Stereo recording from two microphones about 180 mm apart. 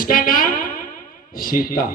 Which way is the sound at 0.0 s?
50° left (ahead or behind).